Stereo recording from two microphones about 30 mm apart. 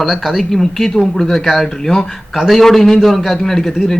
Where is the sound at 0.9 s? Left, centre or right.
Centre.